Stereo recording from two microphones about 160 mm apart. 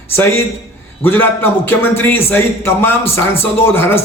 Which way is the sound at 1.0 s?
15° left (ahead or behind).